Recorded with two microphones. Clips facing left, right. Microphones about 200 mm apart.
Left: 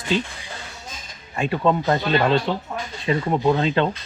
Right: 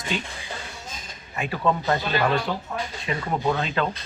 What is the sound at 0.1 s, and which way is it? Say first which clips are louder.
Speech: left 8 dB; 30° left (ahead or behind).